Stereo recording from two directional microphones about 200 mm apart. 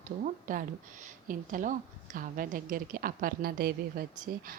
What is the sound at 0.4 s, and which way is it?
A woman's voice, 40° right (ahead or behind).